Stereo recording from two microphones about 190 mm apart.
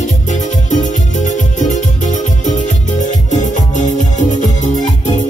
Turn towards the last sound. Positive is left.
turn(degrees=40)  # may be behind; listen again after turning